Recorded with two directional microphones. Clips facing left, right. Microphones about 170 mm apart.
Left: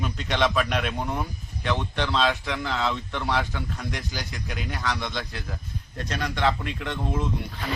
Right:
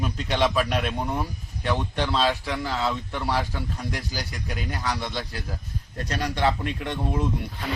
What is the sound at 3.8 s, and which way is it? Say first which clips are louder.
Speech: right 1 dB; 35° right (ahead or behind).